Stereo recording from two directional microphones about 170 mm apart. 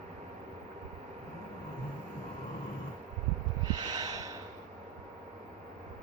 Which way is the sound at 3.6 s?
20° right (ahead or behind).